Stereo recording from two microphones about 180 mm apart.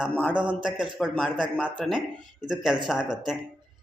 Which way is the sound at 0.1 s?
5° left (ahead or behind).